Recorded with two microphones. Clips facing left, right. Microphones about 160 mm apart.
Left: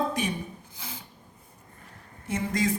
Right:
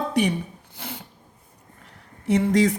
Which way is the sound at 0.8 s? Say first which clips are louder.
Right 8 dB; 65° right (ahead or behind).